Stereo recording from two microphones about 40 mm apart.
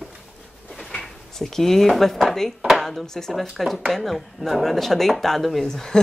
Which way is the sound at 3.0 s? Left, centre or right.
Centre.